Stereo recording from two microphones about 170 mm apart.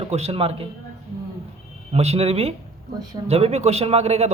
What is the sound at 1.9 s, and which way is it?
A man's voice, 40° right (ahead or behind).